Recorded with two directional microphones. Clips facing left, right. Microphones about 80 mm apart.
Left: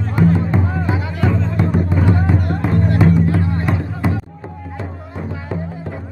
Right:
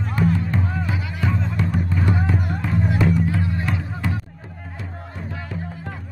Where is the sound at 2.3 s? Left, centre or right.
Centre.